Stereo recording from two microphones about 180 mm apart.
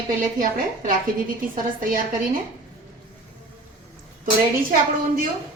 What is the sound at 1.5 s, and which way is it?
Speech, 50° right (ahead or behind).